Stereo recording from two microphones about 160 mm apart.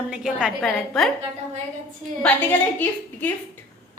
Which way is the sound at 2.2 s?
10° left (ahead or behind).